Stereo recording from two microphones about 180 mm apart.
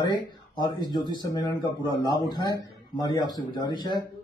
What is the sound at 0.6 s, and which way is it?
Speech, 25° left (ahead or behind).